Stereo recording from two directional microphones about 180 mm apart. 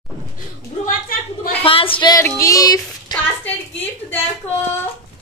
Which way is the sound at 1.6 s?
30° left (ahead or behind).